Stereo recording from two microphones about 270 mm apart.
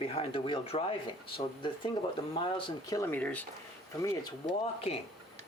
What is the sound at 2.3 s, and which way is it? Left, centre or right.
Speech, centre.